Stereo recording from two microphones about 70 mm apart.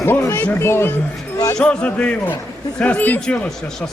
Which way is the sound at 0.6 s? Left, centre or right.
Left.